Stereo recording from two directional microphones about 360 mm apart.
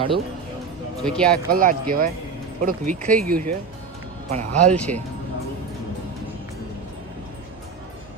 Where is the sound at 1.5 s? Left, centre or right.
Right.